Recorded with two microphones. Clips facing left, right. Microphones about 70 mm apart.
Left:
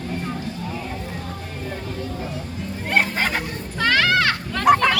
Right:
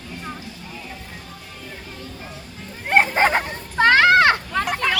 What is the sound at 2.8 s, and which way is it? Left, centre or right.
Hubbub, right.